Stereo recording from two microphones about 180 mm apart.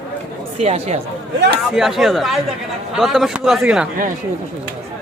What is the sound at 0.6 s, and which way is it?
Speech, 35° right (ahead or behind).